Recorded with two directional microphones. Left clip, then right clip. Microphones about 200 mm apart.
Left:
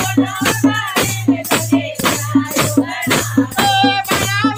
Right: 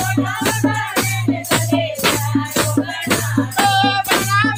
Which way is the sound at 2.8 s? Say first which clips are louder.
Left 3 dB; 45° left (ahead or behind).